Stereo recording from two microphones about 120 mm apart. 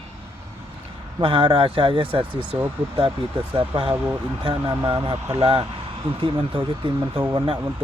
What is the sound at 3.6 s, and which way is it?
Speech, 45° right (ahead or behind).